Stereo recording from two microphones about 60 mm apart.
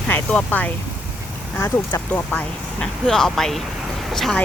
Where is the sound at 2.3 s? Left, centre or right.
Centre.